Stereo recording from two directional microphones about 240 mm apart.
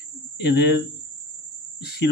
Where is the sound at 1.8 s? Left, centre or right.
Left.